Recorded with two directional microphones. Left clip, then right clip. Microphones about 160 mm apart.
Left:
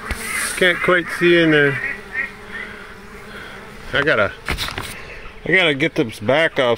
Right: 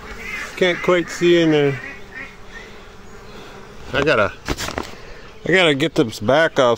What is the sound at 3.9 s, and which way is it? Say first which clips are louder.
Speech: even; 10° right (ahead or behind).